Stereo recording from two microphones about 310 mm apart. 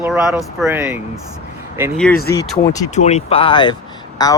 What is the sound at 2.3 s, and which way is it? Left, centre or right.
Speech, centre.